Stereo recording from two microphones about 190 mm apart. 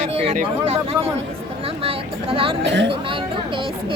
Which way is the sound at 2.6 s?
70° right (ahead or behind).